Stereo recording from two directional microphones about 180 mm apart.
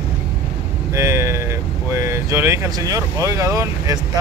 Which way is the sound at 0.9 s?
15° right (ahead or behind).